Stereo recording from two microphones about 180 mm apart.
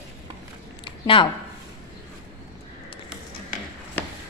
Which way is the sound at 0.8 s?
30° left (ahead or behind).